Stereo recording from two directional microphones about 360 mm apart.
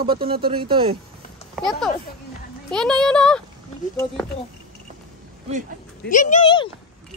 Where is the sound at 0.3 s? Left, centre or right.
Right.